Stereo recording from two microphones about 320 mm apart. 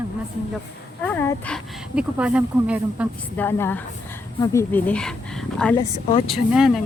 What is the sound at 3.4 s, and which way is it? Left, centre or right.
Speech, centre.